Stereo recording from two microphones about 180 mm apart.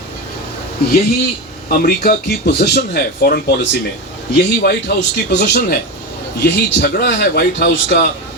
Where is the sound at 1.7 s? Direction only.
60° left (ahead or behind).